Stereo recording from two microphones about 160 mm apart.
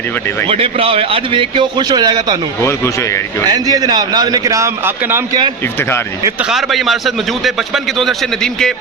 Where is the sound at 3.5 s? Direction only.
25° right (ahead or behind).